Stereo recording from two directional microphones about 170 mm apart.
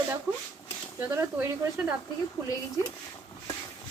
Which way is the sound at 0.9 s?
15° right (ahead or behind).